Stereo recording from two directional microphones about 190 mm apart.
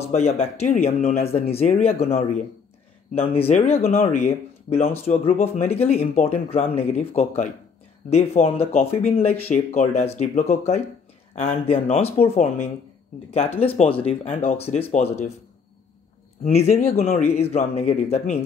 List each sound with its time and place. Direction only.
0.0 s speech: 35° left (ahead or behind)
16.4 s speech: 35° left (ahead or behind)